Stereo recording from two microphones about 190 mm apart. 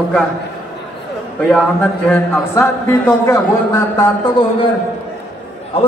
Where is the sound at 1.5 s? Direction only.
5° left (ahead or behind); by 4.6 s 25° left (ahead or behind).